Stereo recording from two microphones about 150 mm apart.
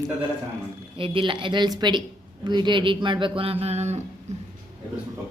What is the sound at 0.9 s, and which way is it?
Speech, 35° right (ahead or behind).